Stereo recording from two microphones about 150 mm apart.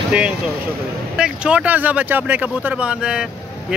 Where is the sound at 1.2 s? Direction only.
5° right (ahead or behind).